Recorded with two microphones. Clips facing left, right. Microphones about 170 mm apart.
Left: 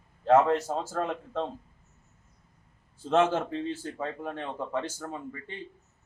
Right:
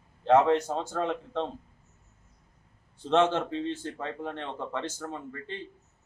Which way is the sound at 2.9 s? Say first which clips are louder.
Even; 5° left (ahead or behind).